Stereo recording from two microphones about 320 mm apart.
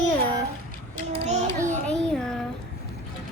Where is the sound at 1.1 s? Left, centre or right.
Centre.